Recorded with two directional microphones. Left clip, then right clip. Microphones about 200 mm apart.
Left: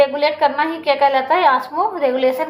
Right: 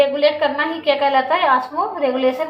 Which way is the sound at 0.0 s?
45° left (ahead or behind).